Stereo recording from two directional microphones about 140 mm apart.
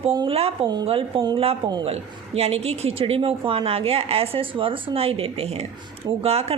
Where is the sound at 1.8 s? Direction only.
45° right (ahead or behind).